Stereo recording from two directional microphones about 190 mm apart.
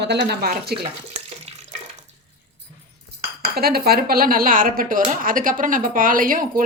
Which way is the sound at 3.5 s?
55° right (ahead or behind).